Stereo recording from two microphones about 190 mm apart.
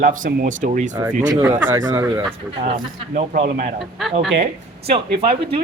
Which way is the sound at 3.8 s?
Centre (ahead or behind).